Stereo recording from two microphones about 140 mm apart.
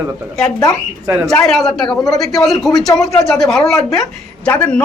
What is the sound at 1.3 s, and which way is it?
A man's voice, 5° left (ahead or behind).